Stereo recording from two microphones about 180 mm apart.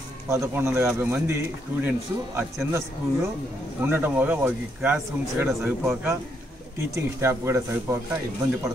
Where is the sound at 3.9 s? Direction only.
10° right (ahead or behind).